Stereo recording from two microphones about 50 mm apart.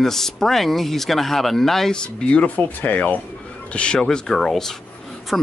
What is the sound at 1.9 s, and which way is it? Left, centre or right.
Speech, centre.